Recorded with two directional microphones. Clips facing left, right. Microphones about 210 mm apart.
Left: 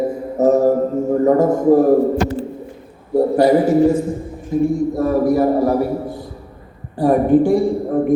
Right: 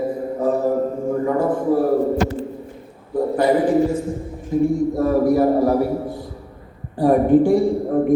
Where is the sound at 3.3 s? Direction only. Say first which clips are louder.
Left 3 dB; 35° left (ahead or behind).